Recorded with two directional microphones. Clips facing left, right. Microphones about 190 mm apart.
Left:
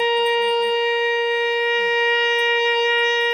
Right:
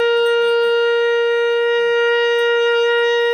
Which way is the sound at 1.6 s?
50° right (ahead or behind).